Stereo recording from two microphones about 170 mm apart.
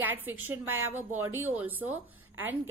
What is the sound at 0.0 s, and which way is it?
A woman's voice, 10° right (ahead or behind).